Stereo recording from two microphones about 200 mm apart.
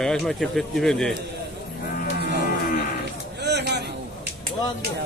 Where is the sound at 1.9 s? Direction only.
50° left (ahead or behind).